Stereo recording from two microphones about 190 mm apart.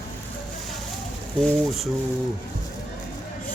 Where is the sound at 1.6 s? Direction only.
Centre (ahead or behind).